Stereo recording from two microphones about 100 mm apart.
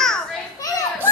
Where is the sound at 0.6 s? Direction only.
35° left (ahead or behind).